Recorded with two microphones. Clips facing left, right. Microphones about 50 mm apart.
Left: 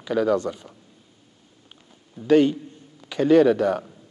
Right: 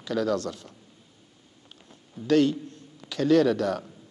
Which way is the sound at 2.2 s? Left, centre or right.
Centre.